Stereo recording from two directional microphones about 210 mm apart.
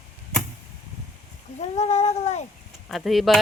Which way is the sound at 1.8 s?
30° left (ahead or behind).